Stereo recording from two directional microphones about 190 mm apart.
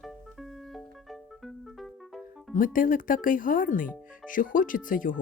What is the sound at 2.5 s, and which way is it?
Speech, 45° left (ahead or behind).